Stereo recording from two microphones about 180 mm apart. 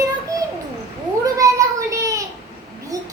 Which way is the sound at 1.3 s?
15° right (ahead or behind).